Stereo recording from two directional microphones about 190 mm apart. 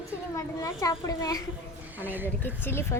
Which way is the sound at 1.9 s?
10° right (ahead or behind).